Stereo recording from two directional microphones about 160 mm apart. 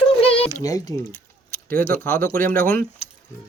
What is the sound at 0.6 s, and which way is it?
Speech, 20° left (ahead or behind).